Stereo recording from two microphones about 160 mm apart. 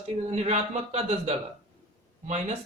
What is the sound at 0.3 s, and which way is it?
Speech, 45° right (ahead or behind).